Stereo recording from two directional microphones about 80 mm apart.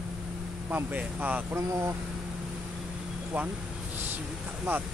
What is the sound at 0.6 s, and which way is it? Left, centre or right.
Speech, right.